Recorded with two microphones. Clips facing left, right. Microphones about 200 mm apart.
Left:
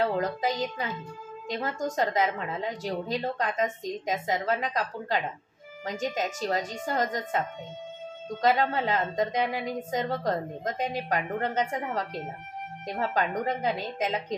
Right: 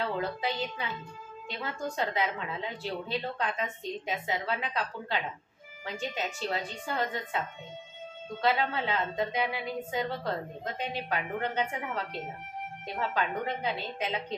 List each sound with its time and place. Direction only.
0.0 s a woman's voice: 40° left (ahead or behind)